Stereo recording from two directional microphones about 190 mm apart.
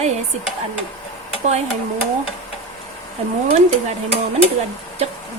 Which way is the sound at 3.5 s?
35° right (ahead or behind).